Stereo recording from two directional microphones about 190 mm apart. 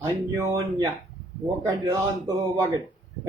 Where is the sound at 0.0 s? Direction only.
15° right (ahead or behind).